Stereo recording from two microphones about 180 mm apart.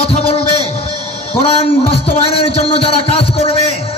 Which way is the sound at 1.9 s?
30° left (ahead or behind).